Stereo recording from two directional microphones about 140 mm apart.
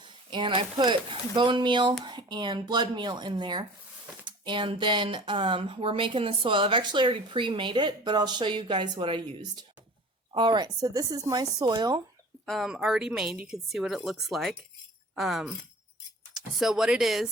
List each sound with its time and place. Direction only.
0.0 s speech: 35° right (ahead or behind)
12.5 s speech: 5° right (ahead or behind)